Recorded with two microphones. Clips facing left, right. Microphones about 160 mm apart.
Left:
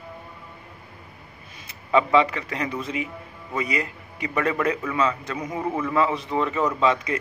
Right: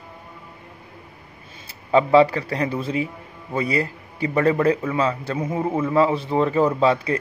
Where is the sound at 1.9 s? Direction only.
35° right (ahead or behind).